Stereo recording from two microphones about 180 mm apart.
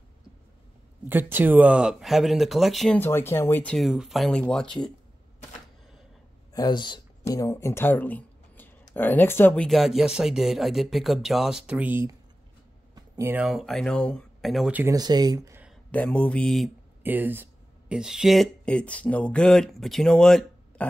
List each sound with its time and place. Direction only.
1.0 s speech: 10° right (ahead or behind)
3.0 s speech: 15° left (ahead or behind)
6.5 s speech: 25° left (ahead or behind); by 12.2 s 10° right (ahead or behind)
12.9 s a sound: 20° right (ahead or behind)
13.3 s speech: 5° right (ahead or behind)
15.0 s speech: 20° right (ahead or behind)
15.9 s speech: 5° left (ahead or behind)
17.0 s speech: 10° right (ahead or behind)